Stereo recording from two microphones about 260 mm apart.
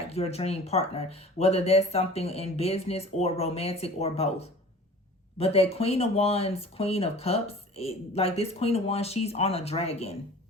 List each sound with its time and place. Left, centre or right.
0.1 s speech: left